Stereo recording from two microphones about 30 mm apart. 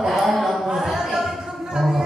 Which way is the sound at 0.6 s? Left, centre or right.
Centre.